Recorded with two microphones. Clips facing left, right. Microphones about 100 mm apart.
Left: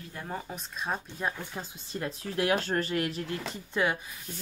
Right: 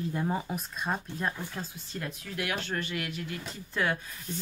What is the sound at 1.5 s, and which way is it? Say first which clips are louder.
Speech: left 1 dB; 20° left (ahead or behind).